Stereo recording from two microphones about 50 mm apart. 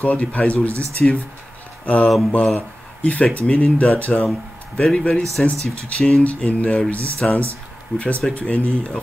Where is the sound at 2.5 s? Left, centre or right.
Left.